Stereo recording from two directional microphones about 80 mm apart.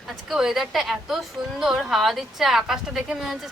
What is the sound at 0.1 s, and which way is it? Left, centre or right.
A woman's voice, centre.